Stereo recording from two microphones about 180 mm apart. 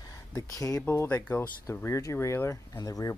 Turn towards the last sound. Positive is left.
turn(degrees=20)  # may be behind; listen again after turning